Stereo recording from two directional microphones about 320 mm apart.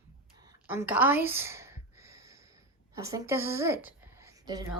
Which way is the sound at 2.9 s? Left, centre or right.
Centre.